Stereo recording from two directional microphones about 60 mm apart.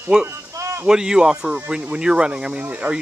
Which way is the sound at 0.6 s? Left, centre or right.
Right.